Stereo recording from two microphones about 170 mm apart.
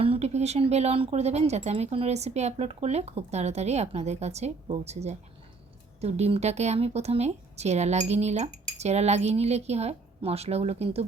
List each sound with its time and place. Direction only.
0.0 s speech: 35° right (ahead or behind)